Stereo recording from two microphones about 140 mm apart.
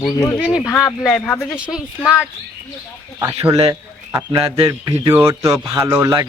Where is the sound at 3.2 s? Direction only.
25° right (ahead or behind).